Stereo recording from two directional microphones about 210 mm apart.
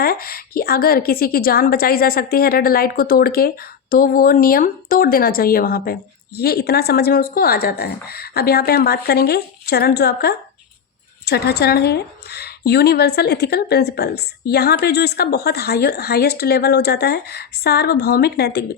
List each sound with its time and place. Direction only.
0.0 s a woman's voice: 45° left (ahead or behind)